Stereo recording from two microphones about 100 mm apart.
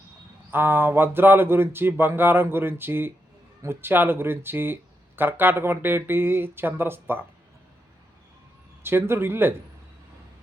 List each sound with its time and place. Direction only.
0.5 s speech: 20° right (ahead or behind)
8.8 s speech: 25° right (ahead or behind)